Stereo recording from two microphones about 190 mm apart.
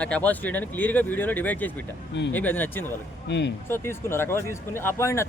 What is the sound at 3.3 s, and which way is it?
Speech, 65° left (ahead or behind).